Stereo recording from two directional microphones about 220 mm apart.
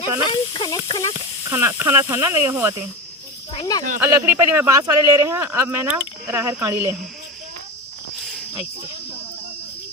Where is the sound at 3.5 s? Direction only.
15° left (ahead or behind).